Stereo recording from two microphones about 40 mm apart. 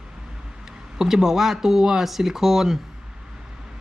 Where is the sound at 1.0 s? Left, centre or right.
Centre.